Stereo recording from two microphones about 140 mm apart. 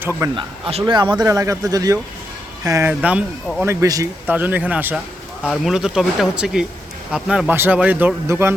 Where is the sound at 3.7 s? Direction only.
20° right (ahead or behind).